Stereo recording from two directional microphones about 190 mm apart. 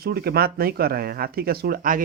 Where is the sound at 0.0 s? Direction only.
55° right (ahead or behind).